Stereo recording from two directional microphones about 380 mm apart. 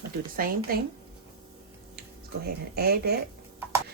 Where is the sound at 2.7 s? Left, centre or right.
Right.